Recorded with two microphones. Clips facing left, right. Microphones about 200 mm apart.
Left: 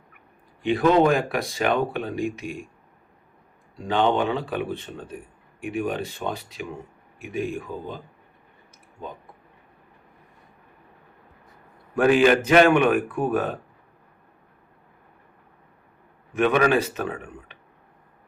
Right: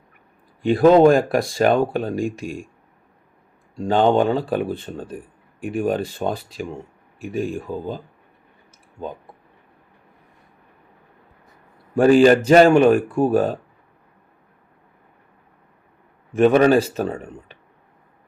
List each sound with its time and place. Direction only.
0.6 s speech: 35° right (ahead or behind)
3.8 s speech: 40° right (ahead or behind)
11.9 s speech: 35° right (ahead or behind)
16.4 s speech: 35° right (ahead or behind)